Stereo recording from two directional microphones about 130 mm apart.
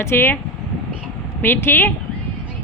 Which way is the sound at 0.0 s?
20° left (ahead or behind).